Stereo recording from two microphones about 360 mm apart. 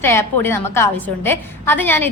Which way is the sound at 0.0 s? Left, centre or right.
Centre.